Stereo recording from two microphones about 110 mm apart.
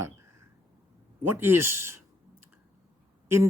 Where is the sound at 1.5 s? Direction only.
20° right (ahead or behind).